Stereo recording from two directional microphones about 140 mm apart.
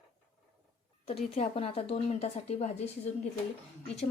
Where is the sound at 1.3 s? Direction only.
45° left (ahead or behind).